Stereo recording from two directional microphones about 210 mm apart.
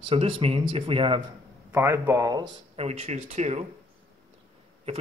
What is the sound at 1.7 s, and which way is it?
Speech, 10° right (ahead or behind).